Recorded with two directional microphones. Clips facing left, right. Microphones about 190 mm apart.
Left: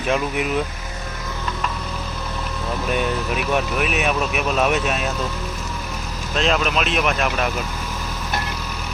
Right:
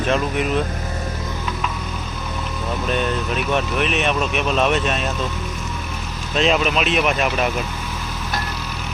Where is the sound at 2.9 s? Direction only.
10° left (ahead or behind).